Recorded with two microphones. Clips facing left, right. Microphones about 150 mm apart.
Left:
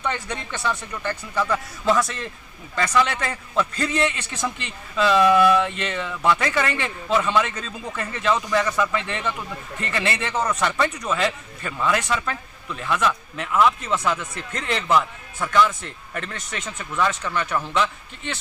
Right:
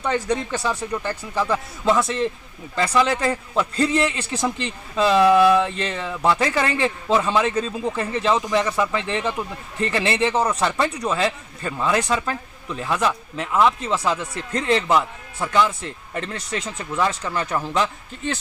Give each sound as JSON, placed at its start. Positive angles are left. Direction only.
{"t": 0.0, "sound": "a man's voice", "side_deg": -35}